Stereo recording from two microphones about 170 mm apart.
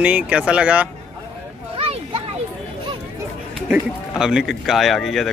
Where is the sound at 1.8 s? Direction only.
35° right (ahead or behind).